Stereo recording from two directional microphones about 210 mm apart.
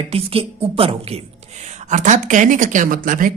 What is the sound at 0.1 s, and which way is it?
A woman's voice, 25° right (ahead or behind).